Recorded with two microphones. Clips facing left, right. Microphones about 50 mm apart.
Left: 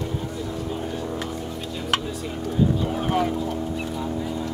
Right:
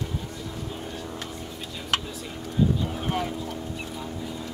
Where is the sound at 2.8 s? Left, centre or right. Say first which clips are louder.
Left 5 dB; centre.